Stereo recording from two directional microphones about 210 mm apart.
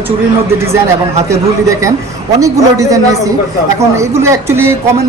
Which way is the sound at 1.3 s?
15° right (ahead or behind).